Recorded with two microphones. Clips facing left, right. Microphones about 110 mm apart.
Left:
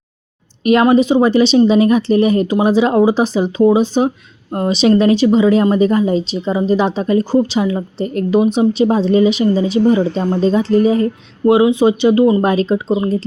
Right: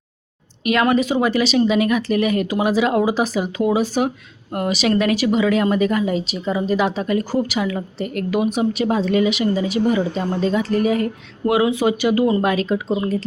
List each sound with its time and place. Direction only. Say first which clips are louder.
0.6 s speech: left 6 dB; 35° left (ahead or behind)